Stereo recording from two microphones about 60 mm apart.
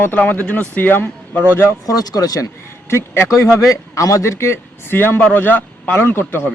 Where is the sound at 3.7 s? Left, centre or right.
Left.